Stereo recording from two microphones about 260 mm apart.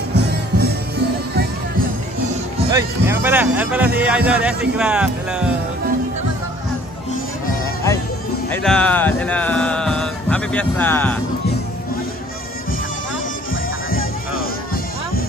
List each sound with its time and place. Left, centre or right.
0.1 s music: right
2.7 s speech: centre
8.5 s speech: centre
13.8 s music: left